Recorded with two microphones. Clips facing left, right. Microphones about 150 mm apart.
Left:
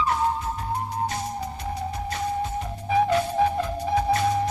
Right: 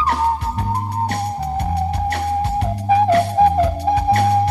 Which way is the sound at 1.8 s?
70° right (ahead or behind).